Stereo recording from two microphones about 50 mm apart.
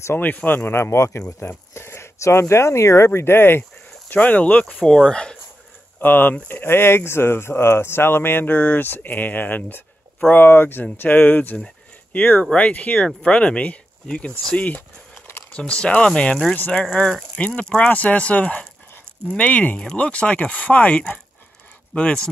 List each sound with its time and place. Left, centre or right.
0.1 s speech: left
0.7 s speech: left
2.1 s speech: left
4.3 s speech: left
5.9 s speech: left
13.0 s speech: centre
16.5 s speech: left
16.9 s speech: centre